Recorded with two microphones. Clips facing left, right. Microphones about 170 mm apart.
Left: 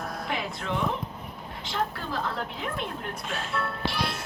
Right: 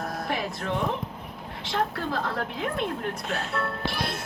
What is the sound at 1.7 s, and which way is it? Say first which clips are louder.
A child's voice: right 3 dB; 60° right (ahead or behind).